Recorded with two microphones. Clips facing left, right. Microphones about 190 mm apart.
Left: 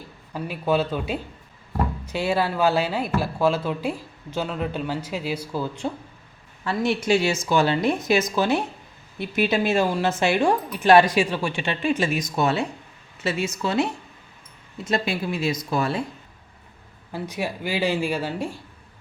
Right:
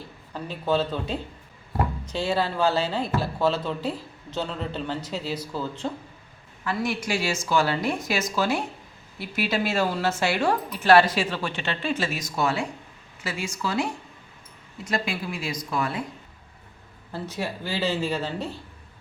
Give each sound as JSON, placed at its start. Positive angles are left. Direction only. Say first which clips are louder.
{"t": 0.3, "sound": "speech", "louder": "left 2 dB", "side_deg": 10}
{"t": 6.7, "sound": "a woman's voice", "louder": "left 6 dB", "side_deg": 25}
{"t": 17.1, "sound": "speech", "louder": "left 2 dB", "side_deg": 15}